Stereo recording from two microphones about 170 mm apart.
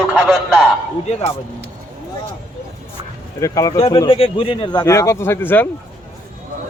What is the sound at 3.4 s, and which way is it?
Speech, 20° left (ahead or behind).